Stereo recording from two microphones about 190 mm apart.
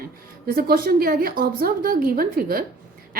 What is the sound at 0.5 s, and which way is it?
A woman's voice, 50° right (ahead or behind).